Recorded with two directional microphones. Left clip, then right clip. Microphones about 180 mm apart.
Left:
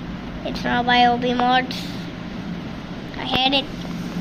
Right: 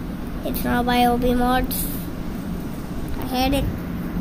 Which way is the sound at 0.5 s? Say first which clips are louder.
Left 3 dB; 20° right (ahead or behind).